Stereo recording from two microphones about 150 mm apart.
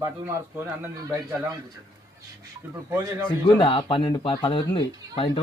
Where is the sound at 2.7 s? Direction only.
15° right (ahead or behind).